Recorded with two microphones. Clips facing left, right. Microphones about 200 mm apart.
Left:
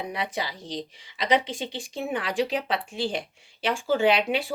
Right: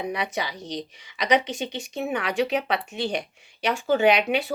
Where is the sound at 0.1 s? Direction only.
25° left (ahead or behind).